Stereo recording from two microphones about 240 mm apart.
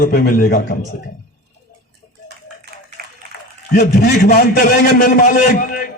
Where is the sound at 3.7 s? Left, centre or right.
Left.